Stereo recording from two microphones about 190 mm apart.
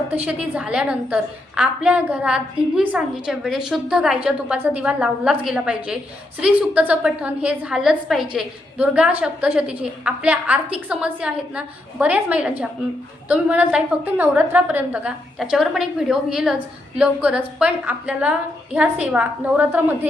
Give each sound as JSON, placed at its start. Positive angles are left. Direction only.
{"t": 0.1, "sound": "a woman's voice", "side_deg": -5}